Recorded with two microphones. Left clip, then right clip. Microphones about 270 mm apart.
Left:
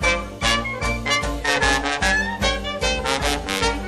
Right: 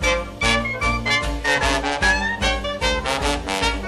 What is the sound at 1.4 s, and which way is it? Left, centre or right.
Swing music, left.